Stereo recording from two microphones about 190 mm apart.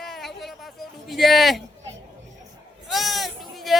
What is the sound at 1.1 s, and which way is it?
Speech, centre (ahead or behind).